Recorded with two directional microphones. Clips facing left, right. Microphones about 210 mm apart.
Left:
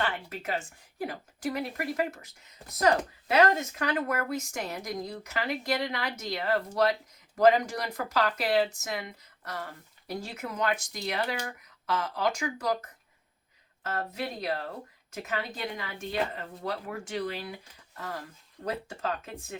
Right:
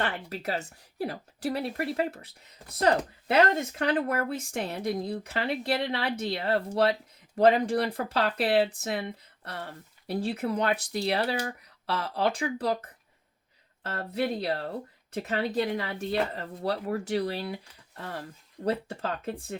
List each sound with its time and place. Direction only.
0.3 s speech: 40° right (ahead or behind)